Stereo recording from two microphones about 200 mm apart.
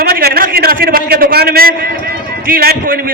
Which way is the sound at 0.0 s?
50° right (ahead or behind).